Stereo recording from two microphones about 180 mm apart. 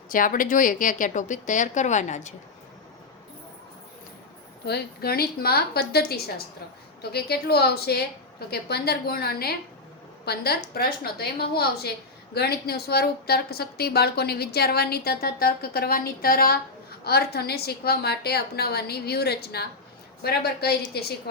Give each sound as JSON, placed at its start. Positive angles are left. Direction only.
{"t": 0.1, "sound": "speech", "side_deg": 50}
{"t": 4.6, "sound": "a woman's voice", "side_deg": 60}